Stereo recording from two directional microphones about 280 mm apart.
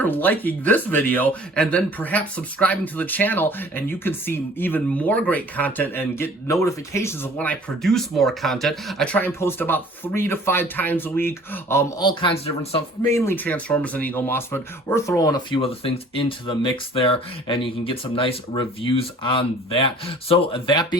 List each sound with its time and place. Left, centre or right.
0.0 s speech: centre